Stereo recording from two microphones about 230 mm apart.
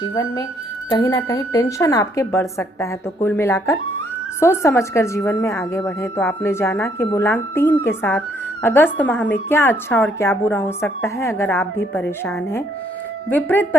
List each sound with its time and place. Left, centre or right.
0.0 s speech: centre